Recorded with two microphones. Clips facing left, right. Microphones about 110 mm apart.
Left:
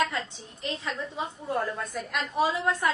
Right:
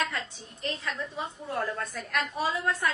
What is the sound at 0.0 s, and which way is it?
A woman's voice, 25° left (ahead or behind).